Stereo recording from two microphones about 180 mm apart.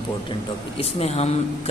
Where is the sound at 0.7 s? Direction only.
35° left (ahead or behind).